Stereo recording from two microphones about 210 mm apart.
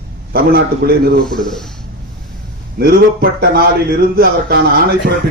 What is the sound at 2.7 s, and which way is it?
A man's voice, 45° right (ahead or behind).